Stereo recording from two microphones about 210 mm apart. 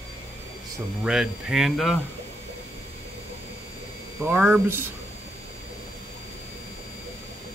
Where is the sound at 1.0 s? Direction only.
5° right (ahead or behind).